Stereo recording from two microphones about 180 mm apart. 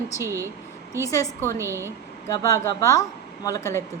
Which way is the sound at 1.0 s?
15° left (ahead or behind).